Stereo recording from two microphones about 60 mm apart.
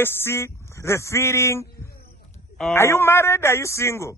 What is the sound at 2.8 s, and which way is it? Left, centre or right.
Speech, left.